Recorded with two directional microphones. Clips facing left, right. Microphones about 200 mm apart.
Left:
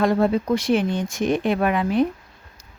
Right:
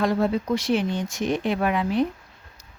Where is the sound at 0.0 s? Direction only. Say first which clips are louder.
Left 3 dB; 55° left (ahead or behind).